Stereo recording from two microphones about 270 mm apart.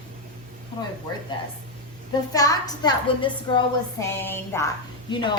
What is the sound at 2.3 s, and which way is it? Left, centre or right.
A woman's voice, centre.